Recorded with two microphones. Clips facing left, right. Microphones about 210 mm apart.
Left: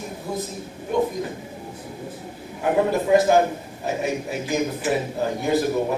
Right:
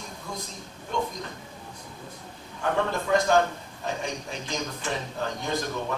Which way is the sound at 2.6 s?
15° left (ahead or behind).